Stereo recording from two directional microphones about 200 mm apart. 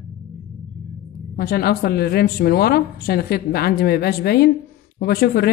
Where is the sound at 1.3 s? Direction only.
50° left (ahead or behind).